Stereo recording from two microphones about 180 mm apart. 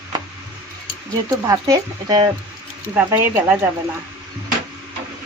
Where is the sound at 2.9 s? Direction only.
10° right (ahead or behind).